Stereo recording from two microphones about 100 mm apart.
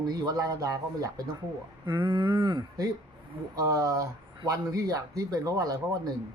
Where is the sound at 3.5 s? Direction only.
35° right (ahead or behind).